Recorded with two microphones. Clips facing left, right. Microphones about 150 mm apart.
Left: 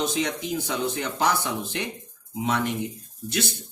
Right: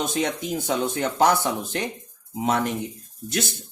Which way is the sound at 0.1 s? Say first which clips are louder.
Right 2 dB; 50° right (ahead or behind).